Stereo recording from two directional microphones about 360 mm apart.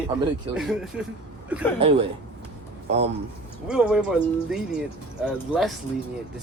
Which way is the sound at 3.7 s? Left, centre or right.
Centre.